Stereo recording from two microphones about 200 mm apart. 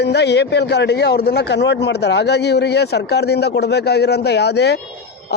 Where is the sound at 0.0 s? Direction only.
55° left (ahead or behind).